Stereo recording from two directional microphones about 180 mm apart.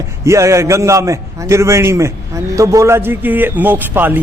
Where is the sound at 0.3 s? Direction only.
15° right (ahead or behind).